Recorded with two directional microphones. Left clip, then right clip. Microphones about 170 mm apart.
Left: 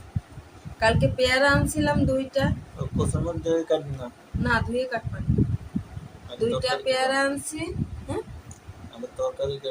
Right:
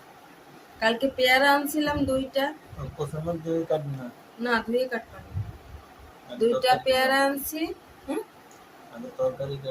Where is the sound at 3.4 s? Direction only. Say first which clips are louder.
Left 4 dB; 40° left (ahead or behind).